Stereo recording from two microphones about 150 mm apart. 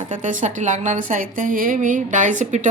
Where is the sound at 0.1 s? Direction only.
55° right (ahead or behind).